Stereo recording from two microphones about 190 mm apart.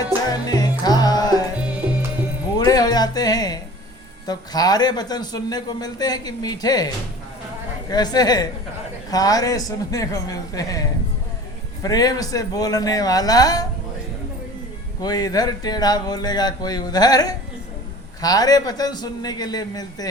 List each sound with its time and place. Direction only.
0.0 s music: 20° left (ahead or behind)
2.6 s a sound: 20° left (ahead or behind)
4.3 s speech: 20° left (ahead or behind)
15.0 s speech: 20° left (ahead or behind)